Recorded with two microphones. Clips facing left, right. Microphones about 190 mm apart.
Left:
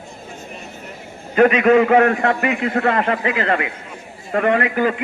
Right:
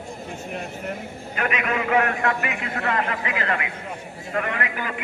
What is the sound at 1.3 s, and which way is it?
A man's voice, 35° left (ahead or behind).